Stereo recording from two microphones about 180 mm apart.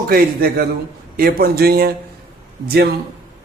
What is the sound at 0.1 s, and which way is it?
A man's voice, 55° right (ahead or behind).